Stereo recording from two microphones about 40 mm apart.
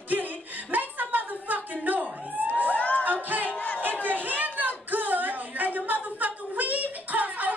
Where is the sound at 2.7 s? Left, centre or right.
Left.